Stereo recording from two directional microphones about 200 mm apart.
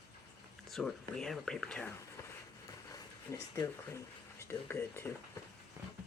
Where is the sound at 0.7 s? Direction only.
Centre (ahead or behind).